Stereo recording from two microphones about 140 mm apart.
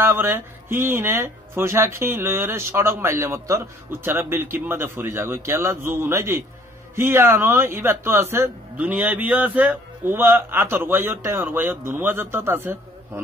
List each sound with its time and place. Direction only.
0.0 s speech: 15° right (ahead or behind)